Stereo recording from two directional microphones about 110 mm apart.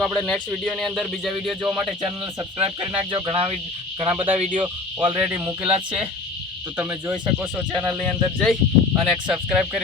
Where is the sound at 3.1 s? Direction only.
55° right (ahead or behind).